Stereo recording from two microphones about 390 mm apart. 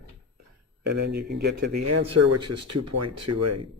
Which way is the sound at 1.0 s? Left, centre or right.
Right.